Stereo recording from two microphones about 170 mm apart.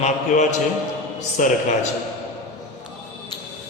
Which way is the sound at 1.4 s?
50° left (ahead or behind).